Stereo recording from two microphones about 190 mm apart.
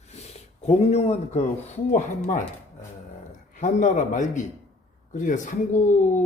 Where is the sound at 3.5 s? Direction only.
40° left (ahead or behind).